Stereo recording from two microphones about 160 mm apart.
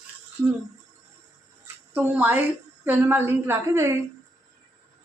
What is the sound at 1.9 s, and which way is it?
A woman's voice, 15° right (ahead or behind).